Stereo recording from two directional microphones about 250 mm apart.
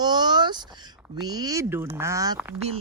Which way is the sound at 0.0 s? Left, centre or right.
Centre.